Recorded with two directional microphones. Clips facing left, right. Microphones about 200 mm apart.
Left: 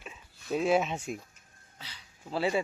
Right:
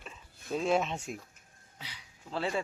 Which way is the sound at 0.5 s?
5° left (ahead or behind).